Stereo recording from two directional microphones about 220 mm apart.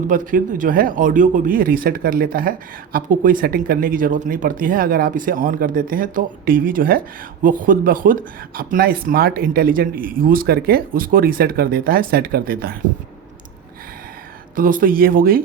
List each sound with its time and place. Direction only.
0.1 s speech: 40° right (ahead or behind)
14.5 s speech: 40° right (ahead or behind)